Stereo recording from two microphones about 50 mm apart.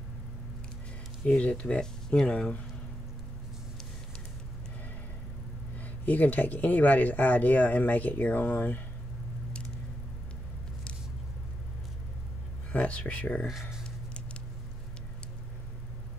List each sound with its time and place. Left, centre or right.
1.2 s speech: left
5.8 s speech: left
12.7 s speech: left
13.5 s speech: centre